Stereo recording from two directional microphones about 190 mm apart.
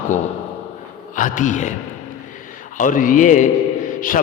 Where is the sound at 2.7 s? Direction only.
45° left (ahead or behind).